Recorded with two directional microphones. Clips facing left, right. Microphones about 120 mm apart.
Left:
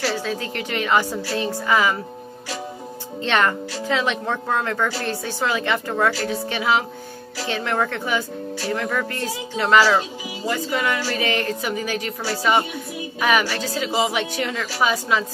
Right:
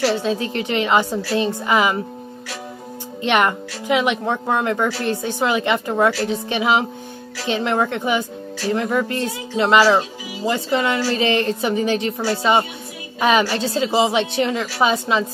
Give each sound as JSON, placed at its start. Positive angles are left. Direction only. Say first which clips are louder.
{"t": 0.0, "sound": "speech", "louder": "right 5 dB", "side_deg": -20}
{"t": 3.2, "sound": "speech", "louder": "right 2 dB", "side_deg": -15}